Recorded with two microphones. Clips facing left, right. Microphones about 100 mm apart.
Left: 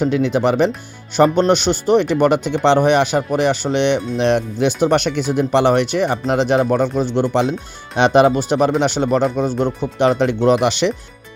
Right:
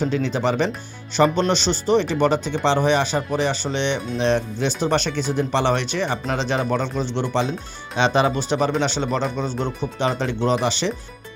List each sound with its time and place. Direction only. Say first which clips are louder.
0.0 s speech: left 5 dB; 60° left (ahead or behind)
9.5 s speech: left 7 dB; 10° left (ahead or behind)
10.0 s speech: left 8 dB; 60° left (ahead or behind)